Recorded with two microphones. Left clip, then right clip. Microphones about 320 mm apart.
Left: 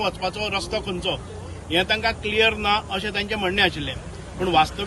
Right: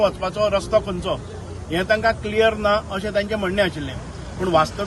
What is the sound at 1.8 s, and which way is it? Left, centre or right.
Speech, right.